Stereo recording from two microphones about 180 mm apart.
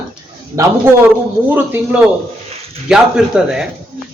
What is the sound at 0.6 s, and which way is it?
A man's voice, 15° right (ahead or behind).